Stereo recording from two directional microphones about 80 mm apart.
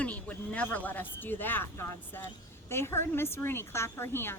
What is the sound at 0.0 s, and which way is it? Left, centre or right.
A woman's voice, centre.